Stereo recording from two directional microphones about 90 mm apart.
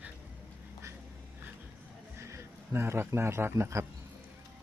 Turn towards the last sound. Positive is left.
turn(degrees=-30)  # may be behind; listen again after turning